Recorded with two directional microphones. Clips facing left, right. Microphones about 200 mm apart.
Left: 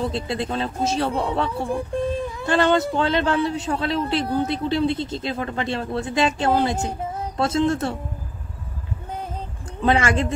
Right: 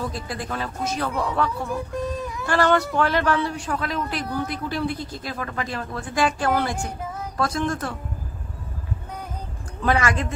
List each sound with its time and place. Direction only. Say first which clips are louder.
0.0 s speech: left 5 dB; 25° left (ahead or behind)
9.8 s speech: left 3 dB; 25° left (ahead or behind)